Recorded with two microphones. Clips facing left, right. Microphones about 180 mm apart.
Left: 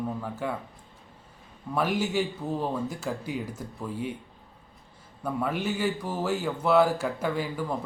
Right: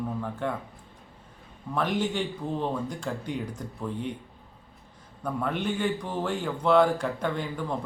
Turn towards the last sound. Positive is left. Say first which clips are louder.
# left 1 dB
turn(degrees=5)  # may be behind; listen again after turning